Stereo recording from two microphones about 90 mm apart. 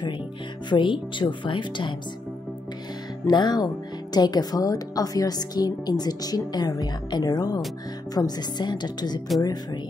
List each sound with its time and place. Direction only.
0.7 s a woman's voice: 65° left (ahead or behind)
3.3 s a woman's voice: 50° left (ahead or behind)